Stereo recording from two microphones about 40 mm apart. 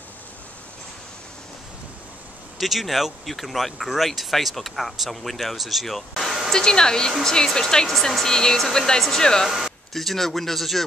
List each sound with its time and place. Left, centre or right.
2.6 s speech: centre
6.5 s speech: centre
9.5 s speech: centre